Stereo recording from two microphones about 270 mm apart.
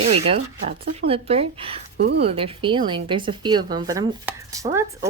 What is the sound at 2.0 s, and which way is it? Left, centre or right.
Speech, right.